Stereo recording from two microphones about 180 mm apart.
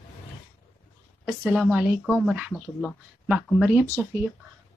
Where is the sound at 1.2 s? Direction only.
5° right (ahead or behind).